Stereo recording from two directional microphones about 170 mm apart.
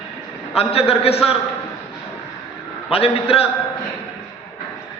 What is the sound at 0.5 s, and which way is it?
Speech, 35° left (ahead or behind).